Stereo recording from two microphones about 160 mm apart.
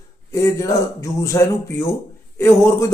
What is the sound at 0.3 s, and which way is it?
Speech, 20° left (ahead or behind).